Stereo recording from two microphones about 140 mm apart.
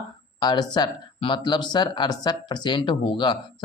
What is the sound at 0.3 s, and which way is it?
Speech, 30° left (ahead or behind).